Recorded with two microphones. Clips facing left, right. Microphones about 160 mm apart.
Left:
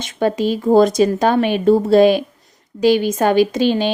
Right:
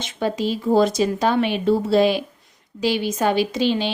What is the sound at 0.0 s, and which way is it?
Speech, 50° left (ahead or behind).